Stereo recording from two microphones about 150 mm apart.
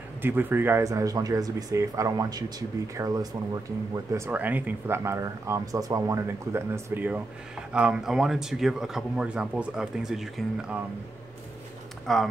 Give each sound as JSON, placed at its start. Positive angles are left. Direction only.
{"t": 0.2, "sound": "speech", "side_deg": -15}
{"t": 4.3, "sound": "speech", "side_deg": -10}
{"t": 12.1, "sound": "speech", "side_deg": 5}